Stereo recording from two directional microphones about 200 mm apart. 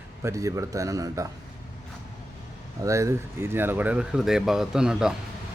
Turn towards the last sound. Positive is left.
turn(degrees=-5)  # may be behind; listen again after turning